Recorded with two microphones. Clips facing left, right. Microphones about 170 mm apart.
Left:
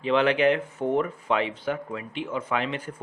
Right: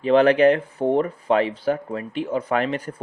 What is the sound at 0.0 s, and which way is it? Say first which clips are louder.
A man's voice: right 6 dB; 40° right (ahead or behind).